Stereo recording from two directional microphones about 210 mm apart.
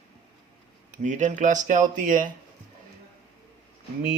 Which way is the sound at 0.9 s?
35° right (ahead or behind).